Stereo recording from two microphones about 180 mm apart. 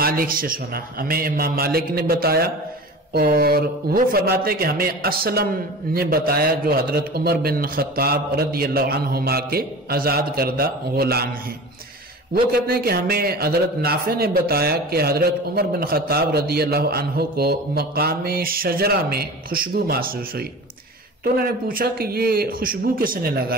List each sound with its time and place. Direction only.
0.0 s speech: 50° right (ahead or behind)
12.5 s speech: 55° right (ahead or behind)